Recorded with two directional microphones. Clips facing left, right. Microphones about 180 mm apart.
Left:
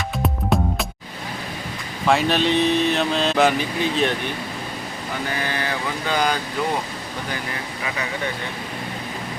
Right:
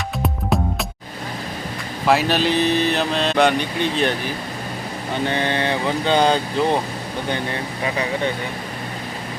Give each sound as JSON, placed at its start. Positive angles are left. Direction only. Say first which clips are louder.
{"t": 0.2, "sound": "music", "louder": "even", "side_deg": 0}
{"t": 2.0, "sound": "speech", "louder": "right 1 dB", "side_deg": 0}
{"t": 5.2, "sound": "vehicle", "louder": "right 6 dB", "side_deg": -25}